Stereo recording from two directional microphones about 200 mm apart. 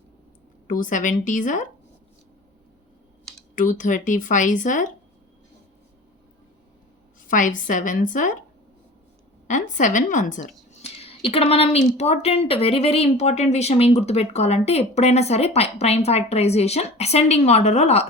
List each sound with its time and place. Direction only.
0.7 s speech: 40° left (ahead or behind)
3.5 s speech: 40° left (ahead or behind)
7.3 s a woman's voice: 40° left (ahead or behind)
9.5 s speech: 40° left (ahead or behind)